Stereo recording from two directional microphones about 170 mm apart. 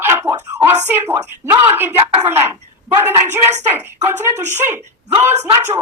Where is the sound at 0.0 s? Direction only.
15° right (ahead or behind).